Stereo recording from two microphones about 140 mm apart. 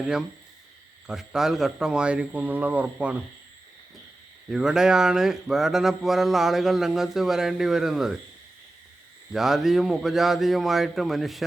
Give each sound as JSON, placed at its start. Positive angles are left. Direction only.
{"t": 1.0, "sound": "speech", "side_deg": -5}
{"t": 4.4, "sound": "speech", "side_deg": -5}
{"t": 9.3, "sound": "speech", "side_deg": -5}